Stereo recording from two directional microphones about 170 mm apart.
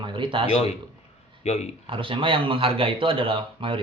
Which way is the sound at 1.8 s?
30° right (ahead or behind).